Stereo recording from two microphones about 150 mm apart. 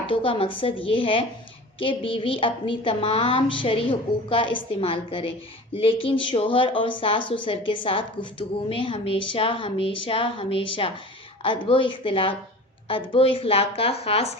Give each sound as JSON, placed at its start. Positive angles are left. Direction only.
{"t": 0.1, "sound": "a woman's voice", "side_deg": 35}